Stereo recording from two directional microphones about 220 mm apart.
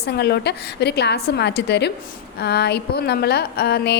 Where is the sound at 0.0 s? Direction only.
45° left (ahead or behind).